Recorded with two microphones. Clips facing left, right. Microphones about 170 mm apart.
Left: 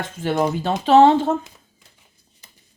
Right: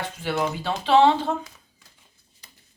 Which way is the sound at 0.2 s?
45° left (ahead or behind).